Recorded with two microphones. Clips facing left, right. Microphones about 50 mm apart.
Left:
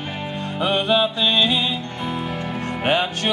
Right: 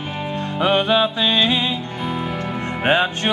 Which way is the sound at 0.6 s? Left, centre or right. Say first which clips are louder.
Right 2 dB; centre.